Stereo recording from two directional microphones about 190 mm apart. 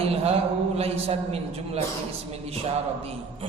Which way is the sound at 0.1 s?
30° right (ahead or behind).